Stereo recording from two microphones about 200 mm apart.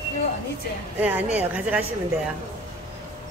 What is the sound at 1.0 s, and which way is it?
Speech, 5° right (ahead or behind).